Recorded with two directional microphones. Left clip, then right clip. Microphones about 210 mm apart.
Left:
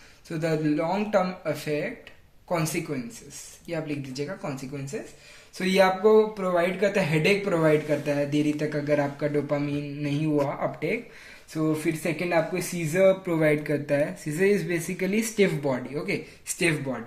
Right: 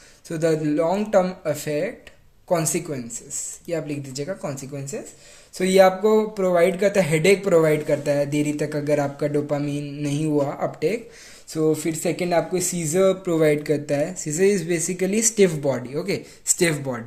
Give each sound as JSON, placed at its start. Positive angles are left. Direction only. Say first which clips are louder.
{"t": 0.3, "sound": "speech", "louder": "right 5 dB", "side_deg": -55}